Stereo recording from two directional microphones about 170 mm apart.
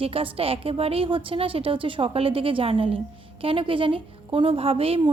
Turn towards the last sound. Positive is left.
turn(degrees=-35)  # may be behind; listen again after turning